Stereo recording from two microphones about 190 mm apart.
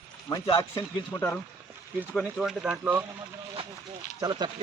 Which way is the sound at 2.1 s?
Centre (ahead or behind).